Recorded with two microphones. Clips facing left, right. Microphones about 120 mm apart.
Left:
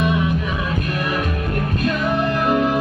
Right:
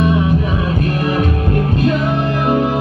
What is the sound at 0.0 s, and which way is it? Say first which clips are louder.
Music: right 5 dB; 30° right (ahead or behind).